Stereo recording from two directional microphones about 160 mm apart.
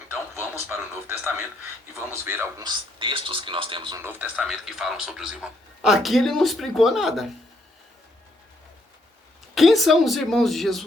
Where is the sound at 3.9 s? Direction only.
15° right (ahead or behind).